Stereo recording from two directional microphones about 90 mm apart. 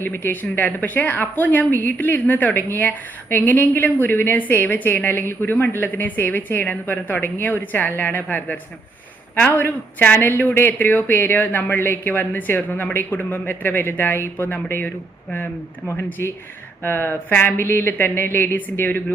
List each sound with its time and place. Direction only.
0.0 s speech: 20° left (ahead or behind)